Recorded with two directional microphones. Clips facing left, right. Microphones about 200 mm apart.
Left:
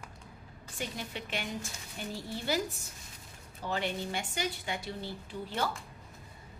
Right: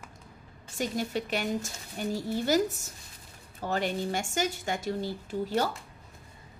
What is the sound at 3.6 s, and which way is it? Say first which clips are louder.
A woman's voice: right 4 dB; 45° right (ahead or behind).